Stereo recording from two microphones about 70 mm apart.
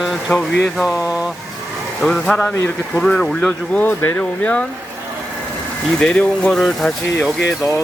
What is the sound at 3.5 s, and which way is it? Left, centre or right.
Speech, left.